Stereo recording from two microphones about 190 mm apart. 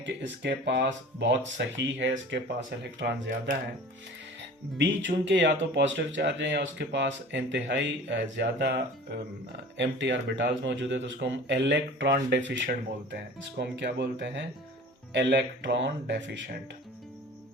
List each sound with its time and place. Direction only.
0.0 s speech: 65° right (ahead or behind)